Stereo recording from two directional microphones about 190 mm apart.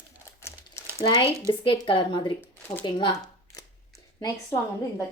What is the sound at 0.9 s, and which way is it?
Speech, 25° left (ahead or behind).